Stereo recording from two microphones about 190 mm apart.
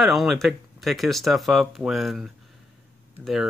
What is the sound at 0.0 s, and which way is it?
Speech, centre (ahead or behind).